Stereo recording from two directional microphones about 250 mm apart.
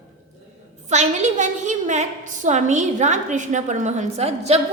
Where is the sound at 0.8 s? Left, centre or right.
Right.